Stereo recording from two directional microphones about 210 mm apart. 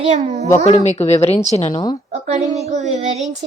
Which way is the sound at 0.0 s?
30° right (ahead or behind).